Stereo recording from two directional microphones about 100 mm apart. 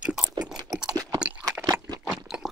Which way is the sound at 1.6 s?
45° right (ahead or behind).